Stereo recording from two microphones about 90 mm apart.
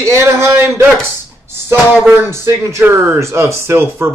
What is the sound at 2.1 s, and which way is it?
A man's voice, 25° right (ahead or behind).